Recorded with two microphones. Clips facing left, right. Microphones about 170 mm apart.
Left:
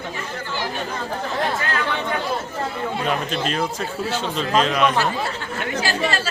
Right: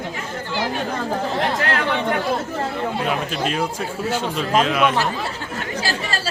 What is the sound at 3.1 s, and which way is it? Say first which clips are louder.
A man's voice: even; 10° right (ahead or behind).